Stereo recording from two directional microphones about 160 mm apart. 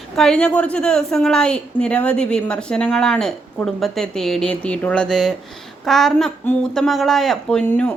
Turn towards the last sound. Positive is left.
turn(degrees=5)  # may be behind; listen again after turning